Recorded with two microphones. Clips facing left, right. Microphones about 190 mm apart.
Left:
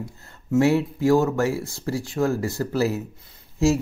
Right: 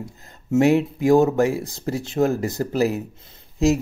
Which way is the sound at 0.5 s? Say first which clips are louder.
Right 2 dB; 20° right (ahead or behind).